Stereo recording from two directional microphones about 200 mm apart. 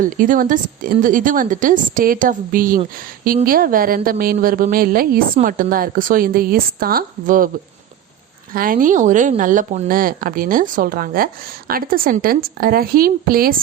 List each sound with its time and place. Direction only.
0.0 s a woman's voice: 40° right (ahead or behind)
8.5 s a woman's voice: 45° right (ahead or behind)